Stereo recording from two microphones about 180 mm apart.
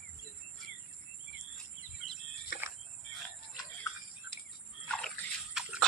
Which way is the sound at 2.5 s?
75° left (ahead or behind).